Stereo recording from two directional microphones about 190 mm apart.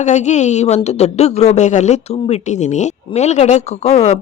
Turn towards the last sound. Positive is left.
turn(degrees=35)  # may be behind; listen again after turning